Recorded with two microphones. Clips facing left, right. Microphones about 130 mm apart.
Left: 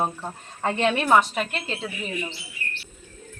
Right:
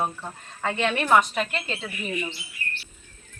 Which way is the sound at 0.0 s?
25° left (ahead or behind).